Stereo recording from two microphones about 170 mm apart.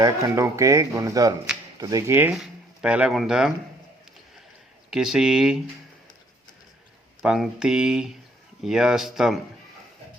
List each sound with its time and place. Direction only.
0.0 s speech: 15° right (ahead or behind)
4.9 s speech: 5° right (ahead or behind)
7.2 s speech: centre (ahead or behind)